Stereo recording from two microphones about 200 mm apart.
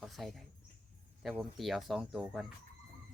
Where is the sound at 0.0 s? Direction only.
Centre (ahead or behind).